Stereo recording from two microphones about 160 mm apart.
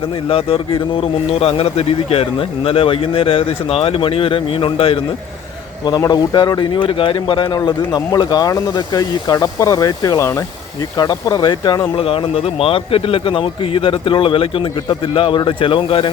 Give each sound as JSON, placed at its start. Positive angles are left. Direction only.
{"t": 0.3, "sound": "a man's voice", "side_deg": 35}
{"t": 5.8, "sound": "a man's voice", "side_deg": 25}